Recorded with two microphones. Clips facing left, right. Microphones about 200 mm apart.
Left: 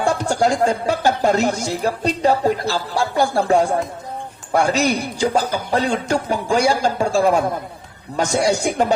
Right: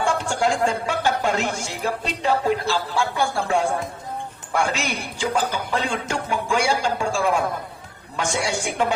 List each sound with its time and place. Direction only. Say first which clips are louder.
0.0 s speech: left 4 dB; 40° left (ahead or behind)